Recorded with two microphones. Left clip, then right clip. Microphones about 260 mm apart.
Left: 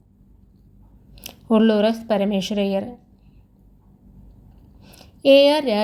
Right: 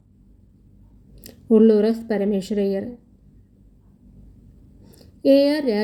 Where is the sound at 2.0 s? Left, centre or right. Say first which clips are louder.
Left 2 dB; left.